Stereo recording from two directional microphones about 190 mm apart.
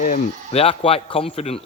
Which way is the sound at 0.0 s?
45° left (ahead or behind).